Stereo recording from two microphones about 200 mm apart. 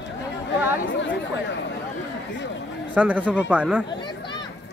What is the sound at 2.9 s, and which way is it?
Speech, 10° right (ahead or behind).